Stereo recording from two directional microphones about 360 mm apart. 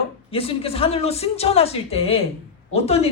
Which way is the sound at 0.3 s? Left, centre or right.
Centre.